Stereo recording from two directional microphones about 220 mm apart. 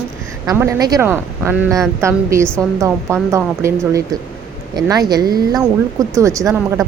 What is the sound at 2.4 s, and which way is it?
Speech, 5° left (ahead or behind).